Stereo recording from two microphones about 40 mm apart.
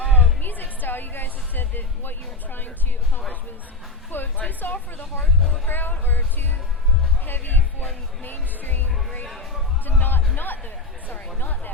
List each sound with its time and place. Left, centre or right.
0.0 s music: left
4.4 s a sound: left
5.6 s music: left
9.3 s a sound: centre
10.0 s music: left
11.3 s chatter: left